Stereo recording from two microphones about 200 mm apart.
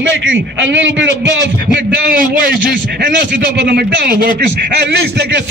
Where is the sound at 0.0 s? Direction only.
65° right (ahead or behind).